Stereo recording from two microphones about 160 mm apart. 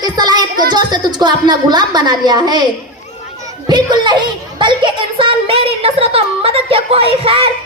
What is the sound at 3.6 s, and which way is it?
Children playing, 30° right (ahead or behind).